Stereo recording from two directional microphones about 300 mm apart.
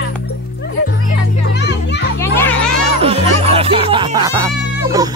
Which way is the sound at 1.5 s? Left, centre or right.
Left.